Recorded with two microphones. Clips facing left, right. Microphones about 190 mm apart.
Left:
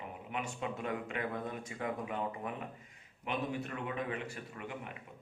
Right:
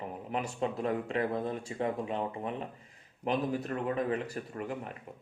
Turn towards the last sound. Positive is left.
turn(degrees=-40)  # may be behind; listen again after turning